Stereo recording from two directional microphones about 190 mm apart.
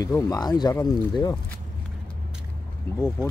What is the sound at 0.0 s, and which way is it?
Speech, 20° left (ahead or behind).